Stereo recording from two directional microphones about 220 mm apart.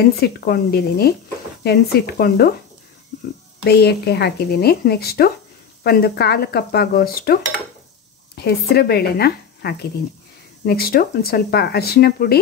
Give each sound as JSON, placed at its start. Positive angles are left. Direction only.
{"t": 0.1, "sound": "speech", "side_deg": 45}
{"t": 3.6, "sound": "speech", "side_deg": 45}
{"t": 8.4, "sound": "speech", "side_deg": 45}